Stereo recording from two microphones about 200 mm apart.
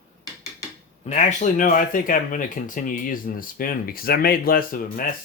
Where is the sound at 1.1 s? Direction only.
35° left (ahead or behind).